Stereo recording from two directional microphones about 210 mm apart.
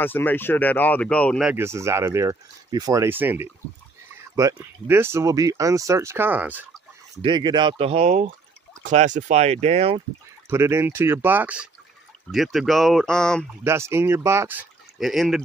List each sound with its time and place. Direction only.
0.0 s speech: 10° left (ahead or behind)
1.5 s speech: 10° right (ahead or behind)
7.2 s speech: 20° right (ahead or behind)
10.5 s speech: 10° right (ahead or behind); by 13.5 s 5° left (ahead or behind)
13.7 s speech: 10° right (ahead or behind)